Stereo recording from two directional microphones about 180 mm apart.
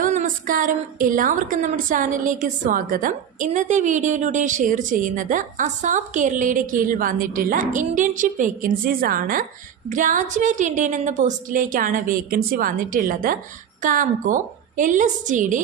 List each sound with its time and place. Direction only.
0.0 s a woman's voice: 45° right (ahead or behind)